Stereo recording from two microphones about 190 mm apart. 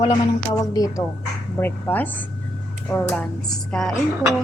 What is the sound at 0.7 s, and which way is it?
Speech, 20° left (ahead or behind).